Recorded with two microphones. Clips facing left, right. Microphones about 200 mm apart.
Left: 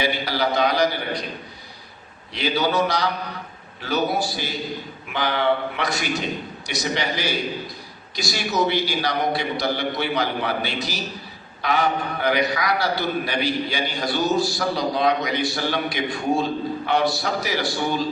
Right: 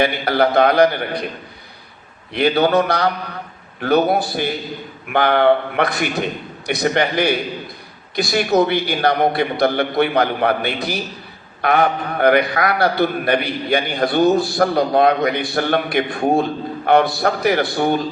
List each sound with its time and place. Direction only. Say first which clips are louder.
0.0 s a man's voice: right 7 dB; 55° right (ahead or behind)
2.3 s a man's voice: right 7 dB; 55° right (ahead or behind)